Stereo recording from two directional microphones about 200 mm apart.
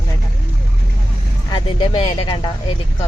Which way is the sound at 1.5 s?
25° left (ahead or behind).